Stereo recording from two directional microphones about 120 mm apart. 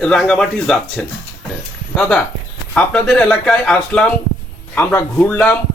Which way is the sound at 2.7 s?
5° left (ahead or behind).